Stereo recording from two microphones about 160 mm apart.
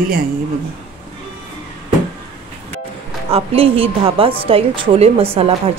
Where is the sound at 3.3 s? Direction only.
35° right (ahead or behind).